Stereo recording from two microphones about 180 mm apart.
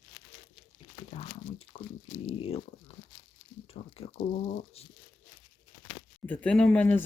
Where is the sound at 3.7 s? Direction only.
35° left (ahead or behind).